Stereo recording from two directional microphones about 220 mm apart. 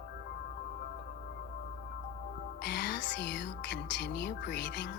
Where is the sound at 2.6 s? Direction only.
50° left (ahead or behind).